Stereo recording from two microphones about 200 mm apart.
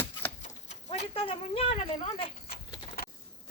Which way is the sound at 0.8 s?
25° left (ahead or behind).